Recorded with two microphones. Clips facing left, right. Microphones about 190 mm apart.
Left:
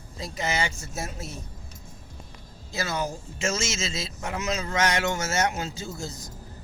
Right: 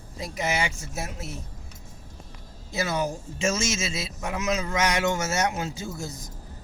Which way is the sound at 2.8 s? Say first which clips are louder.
Right 2 dB; 15° right (ahead or behind).